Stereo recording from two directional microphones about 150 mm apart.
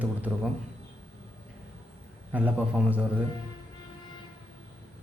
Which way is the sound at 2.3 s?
10° right (ahead or behind).